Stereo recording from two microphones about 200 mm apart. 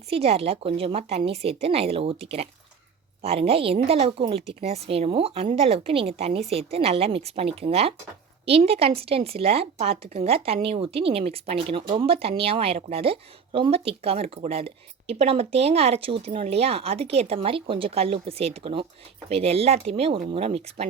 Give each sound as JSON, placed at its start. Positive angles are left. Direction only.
{"t": 0.1, "sound": "a woman's voice", "side_deg": -30}